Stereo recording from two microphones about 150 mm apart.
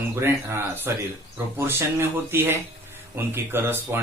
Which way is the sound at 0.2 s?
15° right (ahead or behind).